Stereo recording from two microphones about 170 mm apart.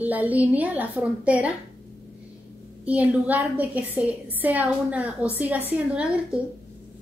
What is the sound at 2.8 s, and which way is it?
A woman's voice, 10° right (ahead or behind).